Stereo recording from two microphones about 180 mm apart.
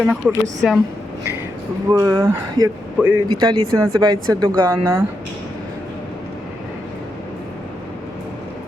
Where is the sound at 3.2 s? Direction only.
25° right (ahead or behind).